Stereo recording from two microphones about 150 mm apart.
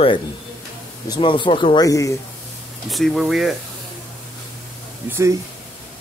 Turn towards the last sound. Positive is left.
turn(degrees=-20)  # may be behind; listen again after turning